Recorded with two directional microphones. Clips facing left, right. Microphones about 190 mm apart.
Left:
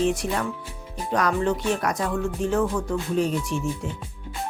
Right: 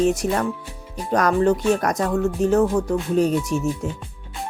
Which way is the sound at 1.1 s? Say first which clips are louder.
Right 5 dB; 45° right (ahead or behind).